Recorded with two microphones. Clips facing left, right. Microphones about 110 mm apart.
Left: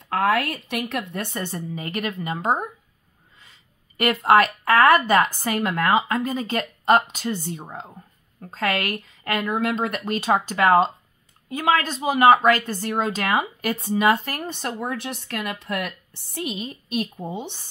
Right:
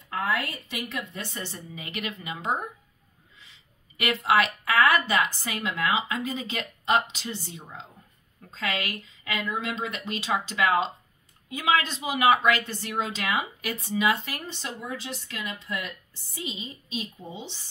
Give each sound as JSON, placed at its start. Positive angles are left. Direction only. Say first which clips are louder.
{"t": 0.1, "sound": "speech", "louder": "left 7 dB", "side_deg": 70}